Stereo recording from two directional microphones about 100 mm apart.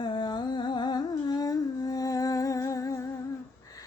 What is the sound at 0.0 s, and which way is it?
Humming, 50° left (ahead or behind).